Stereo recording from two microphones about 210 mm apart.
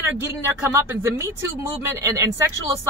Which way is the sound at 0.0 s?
10° right (ahead or behind).